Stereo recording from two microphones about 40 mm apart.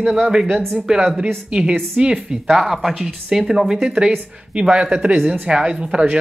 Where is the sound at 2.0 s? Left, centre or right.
Right.